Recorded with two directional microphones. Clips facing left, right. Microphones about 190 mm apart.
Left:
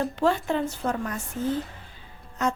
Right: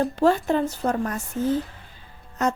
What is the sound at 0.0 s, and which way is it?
A woman's voice, 40° right (ahead or behind).